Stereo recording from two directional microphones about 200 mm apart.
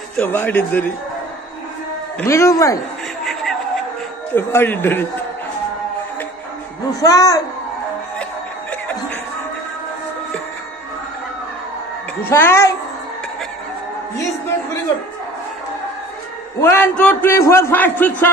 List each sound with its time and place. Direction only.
0.2 s a man's voice: 10° left (ahead or behind)
2.1 s a man's voice: 15° left (ahead or behind)
4.4 s a man's voice: 10° left (ahead or behind)
7.0 s a man's voice: 15° left (ahead or behind)
12.2 s a man's voice: 10° left (ahead or behind)
16.6 s a man's voice: 10° left (ahead or behind)